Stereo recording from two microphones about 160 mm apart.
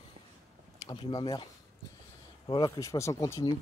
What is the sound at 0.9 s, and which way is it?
Speech, 25° left (ahead or behind).